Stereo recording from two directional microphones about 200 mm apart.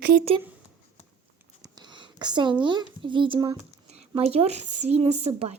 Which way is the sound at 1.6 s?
20° right (ahead or behind).